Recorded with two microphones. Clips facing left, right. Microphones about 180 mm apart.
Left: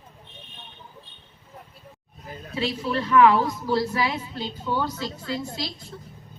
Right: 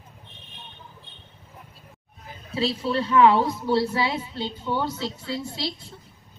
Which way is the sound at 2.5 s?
30° right (ahead or behind).